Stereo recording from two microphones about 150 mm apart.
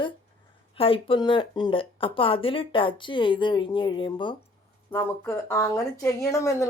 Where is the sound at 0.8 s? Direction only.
40° left (ahead or behind).